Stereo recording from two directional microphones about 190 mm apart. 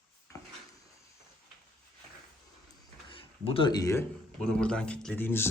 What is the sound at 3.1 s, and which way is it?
Speech, 25° left (ahead or behind).